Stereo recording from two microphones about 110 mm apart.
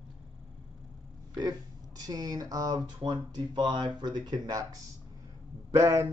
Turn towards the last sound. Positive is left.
turn(degrees=-25)  # may be behind; listen again after turning